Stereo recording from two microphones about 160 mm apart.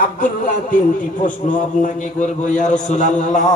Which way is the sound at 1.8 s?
50° left (ahead or behind).